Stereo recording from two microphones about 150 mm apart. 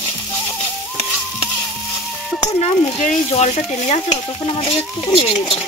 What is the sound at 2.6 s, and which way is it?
Stir, 45° left (ahead or behind).